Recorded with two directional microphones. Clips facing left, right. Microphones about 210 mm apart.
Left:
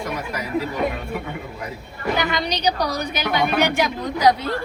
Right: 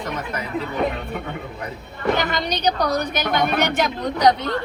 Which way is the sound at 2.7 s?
55° right (ahead or behind).